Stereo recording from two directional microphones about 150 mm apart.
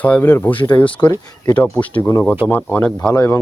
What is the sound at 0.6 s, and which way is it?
Speech, 35° left (ahead or behind).